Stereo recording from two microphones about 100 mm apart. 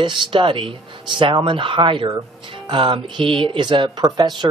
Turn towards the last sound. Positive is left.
turn(degrees=-45)  # may be behind; listen again after turning